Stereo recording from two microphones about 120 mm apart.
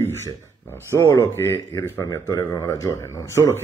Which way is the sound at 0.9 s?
25° left (ahead or behind).